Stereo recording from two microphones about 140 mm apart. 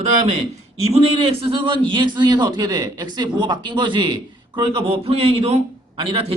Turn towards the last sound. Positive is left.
turn(degrees=-40)  # may be behind; listen again after turning